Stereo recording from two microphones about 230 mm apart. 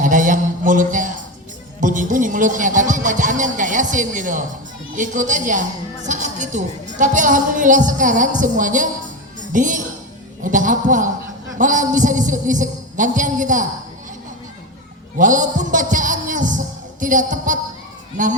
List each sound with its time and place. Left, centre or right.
0.0 s a sound: right
1.8 s a woman's voice: right
15.2 s a man's voice: right